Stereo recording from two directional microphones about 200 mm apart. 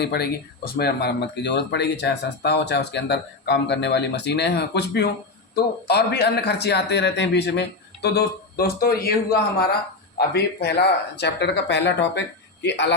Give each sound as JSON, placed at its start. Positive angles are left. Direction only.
{"t": 0.0, "sound": "speech", "side_deg": 55}